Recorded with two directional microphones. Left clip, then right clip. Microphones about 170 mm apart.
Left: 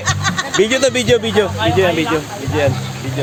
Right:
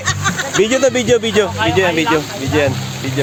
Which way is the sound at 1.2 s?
65° right (ahead or behind).